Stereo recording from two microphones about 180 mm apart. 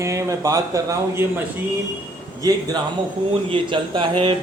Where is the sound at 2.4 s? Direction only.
20° right (ahead or behind).